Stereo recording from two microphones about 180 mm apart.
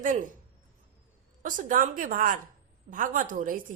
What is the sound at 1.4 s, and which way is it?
A woman's voice, 50° right (ahead or behind).